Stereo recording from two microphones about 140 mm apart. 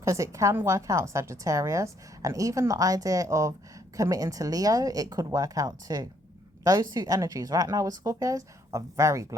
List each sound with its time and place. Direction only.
0.0 s a woman's voice: 20° right (ahead or behind)